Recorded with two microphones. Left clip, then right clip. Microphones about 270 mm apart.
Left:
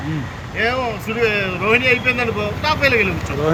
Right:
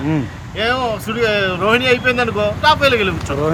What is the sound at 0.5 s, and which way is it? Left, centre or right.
Speech, centre.